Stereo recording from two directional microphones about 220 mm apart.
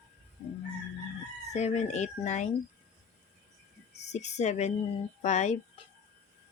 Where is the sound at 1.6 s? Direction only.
30° left (ahead or behind).